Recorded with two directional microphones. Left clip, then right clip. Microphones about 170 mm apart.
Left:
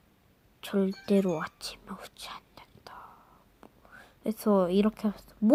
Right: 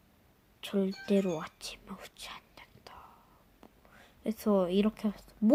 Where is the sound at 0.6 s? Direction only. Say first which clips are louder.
Left 3 dB; 20° left (ahead or behind).